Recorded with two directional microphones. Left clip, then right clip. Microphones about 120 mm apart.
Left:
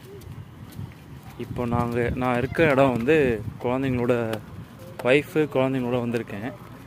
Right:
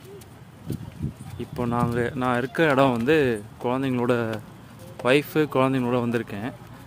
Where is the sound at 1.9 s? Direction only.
10° right (ahead or behind); by 6.5 s 25° right (ahead or behind).